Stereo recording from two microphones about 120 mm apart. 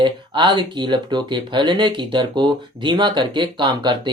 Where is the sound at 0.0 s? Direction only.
40° right (ahead or behind).